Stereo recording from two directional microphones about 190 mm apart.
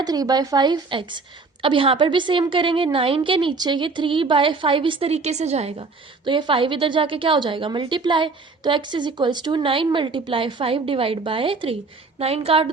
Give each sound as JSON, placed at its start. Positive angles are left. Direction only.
{"t": 0.0, "sound": "a woman's voice", "side_deg": -20}